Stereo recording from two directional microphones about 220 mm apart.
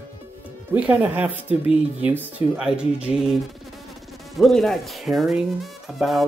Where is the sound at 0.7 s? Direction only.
5° right (ahead or behind).